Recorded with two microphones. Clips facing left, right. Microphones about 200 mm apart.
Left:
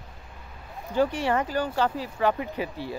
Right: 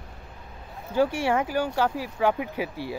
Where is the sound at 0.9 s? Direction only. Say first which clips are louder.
Right 1 dB; 10° right (ahead or behind).